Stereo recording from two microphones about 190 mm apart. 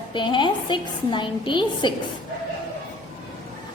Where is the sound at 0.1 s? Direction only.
25° left (ahead or behind).